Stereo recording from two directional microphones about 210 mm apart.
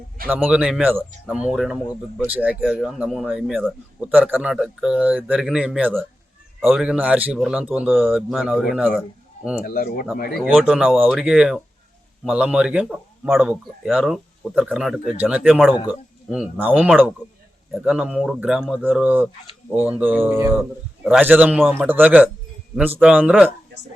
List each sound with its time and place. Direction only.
0.3 s speech: 10° right (ahead or behind)
9.6 s speech: 45° left (ahead or behind)
10.3 s a man's voice: centre (ahead or behind)